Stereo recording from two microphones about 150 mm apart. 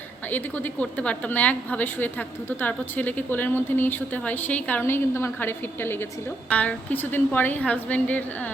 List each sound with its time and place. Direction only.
0.3 s a woman's voice: 10° left (ahead or behind)